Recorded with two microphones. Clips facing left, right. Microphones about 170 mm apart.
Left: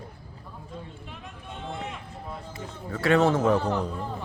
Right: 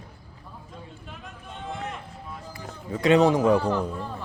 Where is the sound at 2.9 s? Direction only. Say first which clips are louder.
Right 3 dB; 15° right (ahead or behind).